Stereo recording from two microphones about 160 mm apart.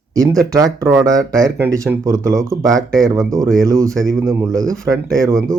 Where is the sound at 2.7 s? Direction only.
5° left (ahead or behind).